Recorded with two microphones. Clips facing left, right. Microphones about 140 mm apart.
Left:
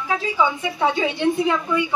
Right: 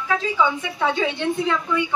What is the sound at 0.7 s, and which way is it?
A woman's voice, 10° left (ahead or behind).